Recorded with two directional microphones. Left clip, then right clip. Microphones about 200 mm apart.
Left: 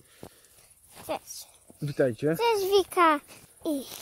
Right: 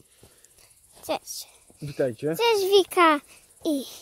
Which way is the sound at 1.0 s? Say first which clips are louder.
Right 4 dB; 55° right (ahead or behind).